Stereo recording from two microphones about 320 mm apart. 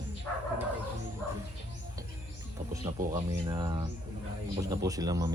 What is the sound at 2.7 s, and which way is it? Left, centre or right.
Speech, centre.